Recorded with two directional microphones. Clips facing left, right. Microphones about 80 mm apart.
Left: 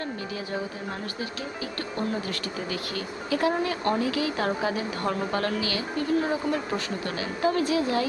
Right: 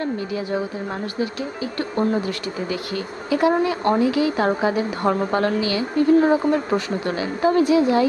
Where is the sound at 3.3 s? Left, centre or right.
Right.